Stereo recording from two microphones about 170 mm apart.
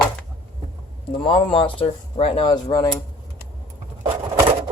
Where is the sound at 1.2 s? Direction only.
30° left (ahead or behind).